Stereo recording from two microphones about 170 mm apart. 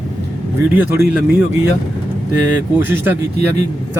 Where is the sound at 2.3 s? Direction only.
15° right (ahead or behind).